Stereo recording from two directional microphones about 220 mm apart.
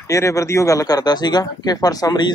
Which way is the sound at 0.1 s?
15° left (ahead or behind).